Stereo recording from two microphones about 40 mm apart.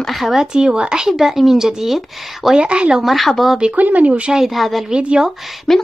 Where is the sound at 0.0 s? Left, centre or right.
Centre.